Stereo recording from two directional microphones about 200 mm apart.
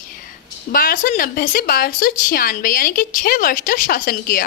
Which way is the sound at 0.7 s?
45° left (ahead or behind).